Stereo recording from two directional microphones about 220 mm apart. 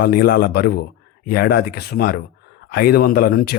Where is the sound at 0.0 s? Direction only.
45° left (ahead or behind).